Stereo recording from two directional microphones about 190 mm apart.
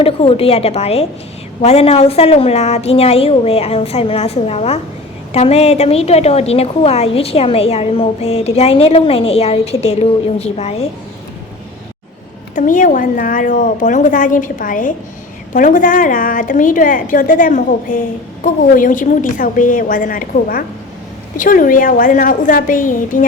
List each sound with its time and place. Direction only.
0.0 s a woman's voice: 30° left (ahead or behind)
12.5 s a woman's voice: 45° left (ahead or behind)